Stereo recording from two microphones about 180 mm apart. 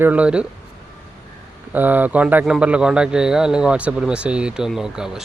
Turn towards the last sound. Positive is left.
turn(degrees=-5)  # may be behind; listen again after turning